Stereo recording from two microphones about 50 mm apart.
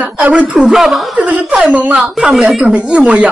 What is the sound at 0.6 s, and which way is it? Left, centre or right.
Speech, centre.